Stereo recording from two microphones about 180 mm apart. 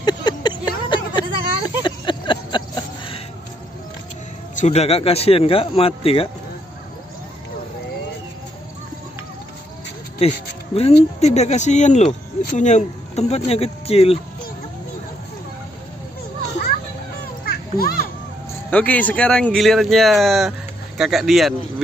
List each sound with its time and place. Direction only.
0.0 s vehicle: 25° left (ahead or behind)
1.8 s a sound: 25° left (ahead or behind)
4.6 s speech: 35° left (ahead or behind)
10.1 s speech: 35° left (ahead or behind)
17.5 s children playing: 55° left (ahead or behind)
18.7 s speech: 10° left (ahead or behind)